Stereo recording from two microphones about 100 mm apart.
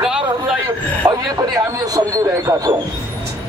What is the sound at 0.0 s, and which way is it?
Vehicle, 5° right (ahead or behind).